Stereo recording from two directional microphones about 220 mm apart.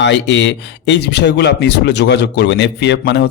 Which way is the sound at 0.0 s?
55° left (ahead or behind).